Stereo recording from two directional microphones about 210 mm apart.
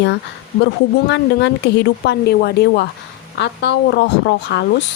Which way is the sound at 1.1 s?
55° left (ahead or behind).